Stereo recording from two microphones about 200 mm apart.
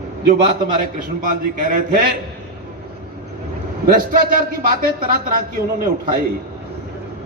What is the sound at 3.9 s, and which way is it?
A man's voice, 45° right (ahead or behind).